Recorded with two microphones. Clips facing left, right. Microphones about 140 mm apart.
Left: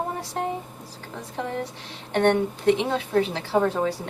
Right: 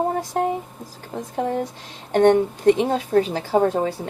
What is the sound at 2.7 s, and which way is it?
A woman's voice, 45° right (ahead or behind).